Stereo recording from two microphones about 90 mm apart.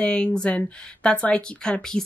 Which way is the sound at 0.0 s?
10° left (ahead or behind).